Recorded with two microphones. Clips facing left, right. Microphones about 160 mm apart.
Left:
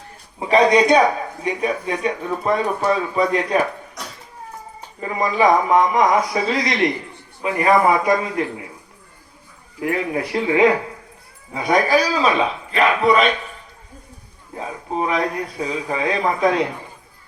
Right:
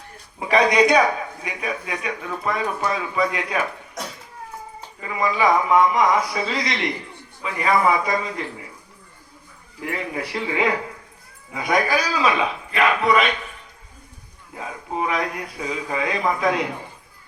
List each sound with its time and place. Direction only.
0.3 s a man's voice: 25° left (ahead or behind)
4.9 s a man's voice: 40° left (ahead or behind)
9.8 s a man's voice: 50° left (ahead or behind)
11.5 s a man's voice: 35° left (ahead or behind)
14.5 s a man's voice: 35° left (ahead or behind)